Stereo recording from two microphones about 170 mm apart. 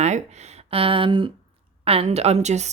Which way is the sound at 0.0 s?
40° right (ahead or behind).